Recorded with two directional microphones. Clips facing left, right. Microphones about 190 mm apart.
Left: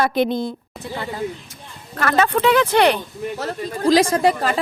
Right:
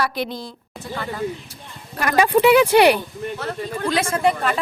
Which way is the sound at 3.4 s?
35° left (ahead or behind).